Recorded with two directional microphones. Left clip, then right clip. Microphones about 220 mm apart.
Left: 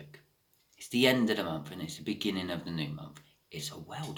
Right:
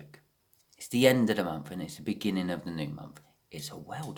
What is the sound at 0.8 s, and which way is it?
Speech, 50° right (ahead or behind).